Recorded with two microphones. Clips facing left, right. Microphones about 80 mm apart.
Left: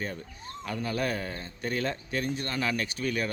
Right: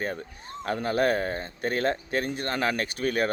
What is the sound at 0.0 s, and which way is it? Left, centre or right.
Speech, right.